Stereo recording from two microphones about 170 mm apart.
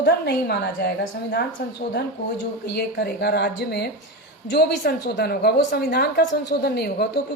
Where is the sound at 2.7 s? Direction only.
70° left (ahead or behind).